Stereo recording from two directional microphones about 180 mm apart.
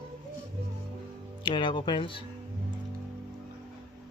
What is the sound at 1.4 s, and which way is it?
Speech, 25° left (ahead or behind).